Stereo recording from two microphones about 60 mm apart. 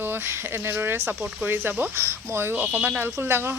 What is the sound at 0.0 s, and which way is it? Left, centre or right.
Speech, right.